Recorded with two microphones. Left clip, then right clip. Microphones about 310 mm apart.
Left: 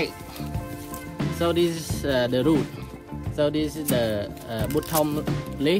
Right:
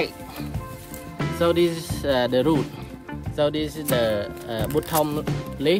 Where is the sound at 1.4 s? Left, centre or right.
Right.